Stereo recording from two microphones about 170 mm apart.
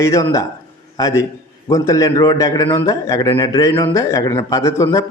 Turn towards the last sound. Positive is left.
turn(degrees=15)  # may be behind; listen again after turning